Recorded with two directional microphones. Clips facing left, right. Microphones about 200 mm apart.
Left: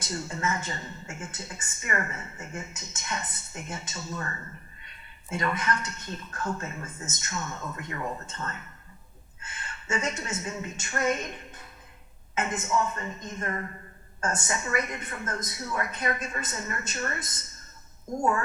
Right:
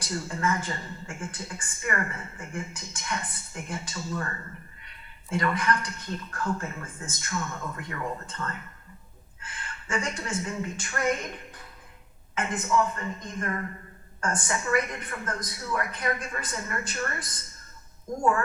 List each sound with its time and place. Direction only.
0.0 s a woman's voice: 25° left (ahead or behind)
5.3 s a woman's voice: 25° left (ahead or behind)